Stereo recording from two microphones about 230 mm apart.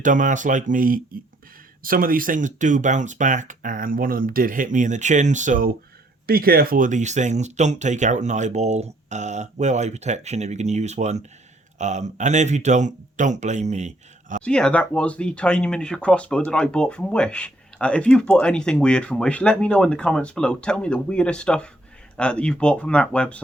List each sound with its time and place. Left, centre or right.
0.0 s speech: right
14.4 s speech: centre